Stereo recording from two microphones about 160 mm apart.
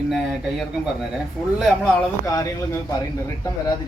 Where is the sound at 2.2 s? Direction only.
20° left (ahead or behind).